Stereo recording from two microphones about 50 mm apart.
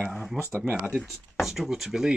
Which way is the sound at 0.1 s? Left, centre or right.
Centre.